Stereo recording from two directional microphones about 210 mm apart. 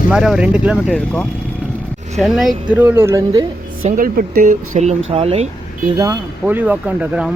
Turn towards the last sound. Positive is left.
turn(degrees=-5)  # may be behind; listen again after turning